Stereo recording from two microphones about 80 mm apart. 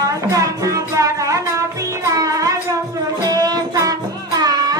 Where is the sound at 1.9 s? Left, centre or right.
Right.